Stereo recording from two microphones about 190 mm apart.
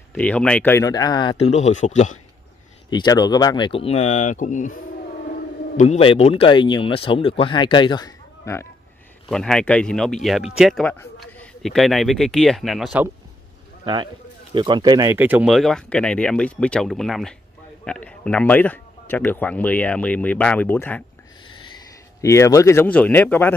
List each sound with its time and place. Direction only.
0.1 s speech: 5° left (ahead or behind); by 2.1 s 40° left (ahead or behind)
2.9 s speech: 20° left (ahead or behind); by 4.7 s 40° left (ahead or behind)
5.8 s speech: 30° left (ahead or behind); by 8.6 s 15° left (ahead or behind)
9.3 s speech: 5° left (ahead or behind)
14.5 s speech: 25° right (ahead or behind); by 21.0 s 10° left (ahead or behind)
22.2 s speech: 15° left (ahead or behind)